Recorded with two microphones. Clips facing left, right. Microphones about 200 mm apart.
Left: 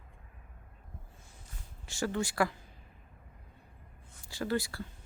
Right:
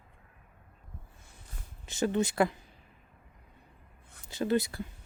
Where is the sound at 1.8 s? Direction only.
20° right (ahead or behind).